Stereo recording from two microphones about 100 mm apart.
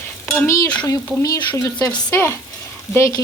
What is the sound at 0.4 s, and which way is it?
Speech, 30° left (ahead or behind).